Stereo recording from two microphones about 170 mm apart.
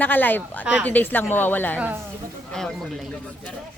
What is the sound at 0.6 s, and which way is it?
Speech, 5° right (ahead or behind).